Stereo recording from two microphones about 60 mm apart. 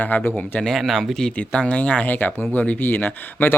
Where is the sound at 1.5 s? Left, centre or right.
Left.